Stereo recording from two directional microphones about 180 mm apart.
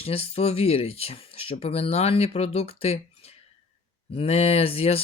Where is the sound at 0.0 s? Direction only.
35° left (ahead or behind).